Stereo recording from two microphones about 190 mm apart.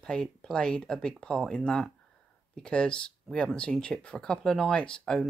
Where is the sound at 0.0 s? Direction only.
5° left (ahead or behind).